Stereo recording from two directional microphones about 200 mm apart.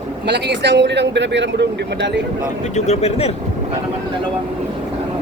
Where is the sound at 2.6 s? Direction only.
35° left (ahead or behind).